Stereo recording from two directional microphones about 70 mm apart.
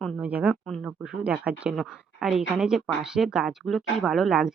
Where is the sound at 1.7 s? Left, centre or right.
Centre.